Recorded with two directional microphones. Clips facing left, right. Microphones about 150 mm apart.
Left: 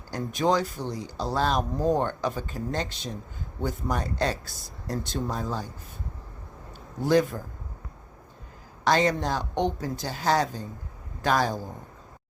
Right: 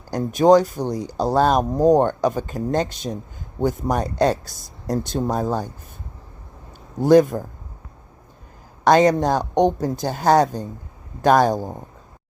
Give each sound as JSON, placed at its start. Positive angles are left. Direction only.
{"t": 0.3, "sound": "speech", "side_deg": -45}
{"t": 7.0, "sound": "speech", "side_deg": -45}
{"t": 8.8, "sound": "speech", "side_deg": -50}